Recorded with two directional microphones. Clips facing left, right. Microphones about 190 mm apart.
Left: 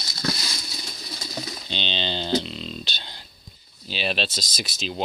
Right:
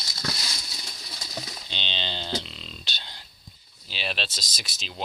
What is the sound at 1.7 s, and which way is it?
Speech, 10° right (ahead or behind).